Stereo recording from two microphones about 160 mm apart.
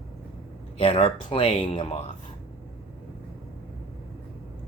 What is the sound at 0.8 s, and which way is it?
Speech, 35° left (ahead or behind).